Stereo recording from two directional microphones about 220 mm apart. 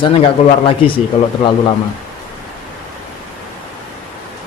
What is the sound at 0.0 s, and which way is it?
A man's voice, 25° left (ahead or behind).